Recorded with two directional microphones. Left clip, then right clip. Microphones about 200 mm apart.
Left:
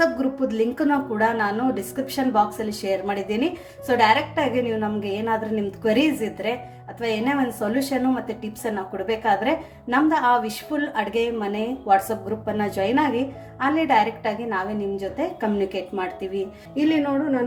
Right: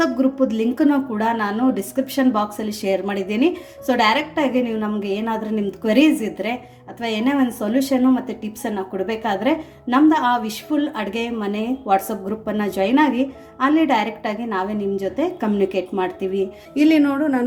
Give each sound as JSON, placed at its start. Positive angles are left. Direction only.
{"t": 0.0, "sound": "a woman's voice", "side_deg": -30}
{"t": 9.0, "sound": "a woman's voice", "side_deg": -30}
{"t": 16.7, "sound": "music", "side_deg": -50}